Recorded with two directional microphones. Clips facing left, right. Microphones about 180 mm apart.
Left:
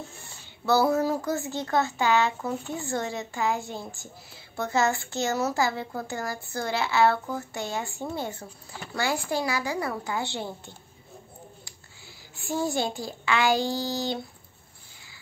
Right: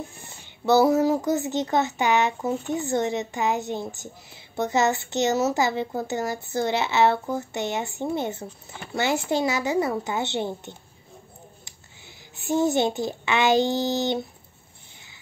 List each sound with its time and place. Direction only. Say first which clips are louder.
0.2 s a child's voice: right 5 dB; 20° right (ahead or behind)
12.4 s a child's voice: right 6 dB; 20° right (ahead or behind)